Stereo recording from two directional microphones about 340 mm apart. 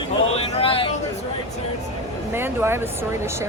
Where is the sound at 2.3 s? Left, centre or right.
Centre.